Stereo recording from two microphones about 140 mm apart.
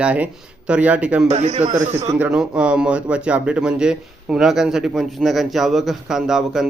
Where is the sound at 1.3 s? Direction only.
55° right (ahead or behind).